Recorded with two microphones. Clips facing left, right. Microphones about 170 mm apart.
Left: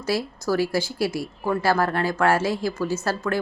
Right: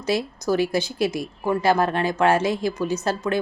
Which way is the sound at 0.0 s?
20° right (ahead or behind).